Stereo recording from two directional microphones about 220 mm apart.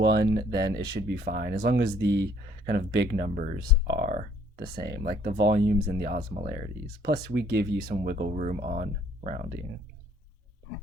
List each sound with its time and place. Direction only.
0.0 s speech: 50° right (ahead or behind)
4.1 s a sound: 35° right (ahead or behind)
4.6 s speech: 45° right (ahead or behind)